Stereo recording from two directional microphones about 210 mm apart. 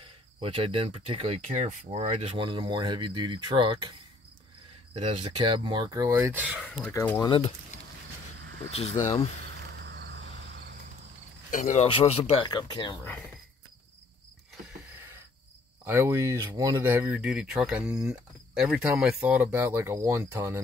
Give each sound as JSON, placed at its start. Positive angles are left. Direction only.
{"t": 0.0, "sound": "speech", "side_deg": -25}
{"t": 4.9, "sound": "speech", "side_deg": -30}
{"t": 6.9, "sound": "speech", "side_deg": 10}
{"t": 7.2, "sound": "speech", "side_deg": 25}
{"t": 8.6, "sound": "speech", "side_deg": 30}
{"t": 9.4, "sound": "cricket", "side_deg": -50}
{"t": 11.5, "sound": "speech", "side_deg": 35}
{"t": 14.5, "sound": "a sound", "side_deg": -10}
{"t": 15.8, "sound": "speech", "side_deg": -10}